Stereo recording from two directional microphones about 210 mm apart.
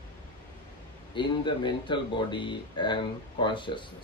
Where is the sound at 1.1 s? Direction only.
20° left (ahead or behind).